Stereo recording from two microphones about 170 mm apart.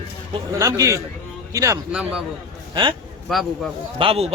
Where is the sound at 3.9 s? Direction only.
35° right (ahead or behind).